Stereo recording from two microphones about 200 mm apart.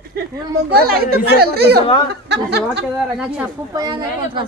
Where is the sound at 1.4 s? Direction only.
50° right (ahead or behind).